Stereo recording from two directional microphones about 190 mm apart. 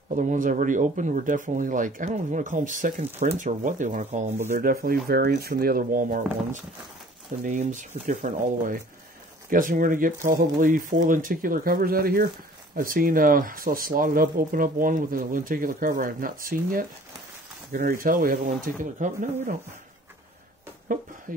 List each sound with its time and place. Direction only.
0.1 s speech: 40° right (ahead or behind)
20.9 s speech: 45° right (ahead or behind)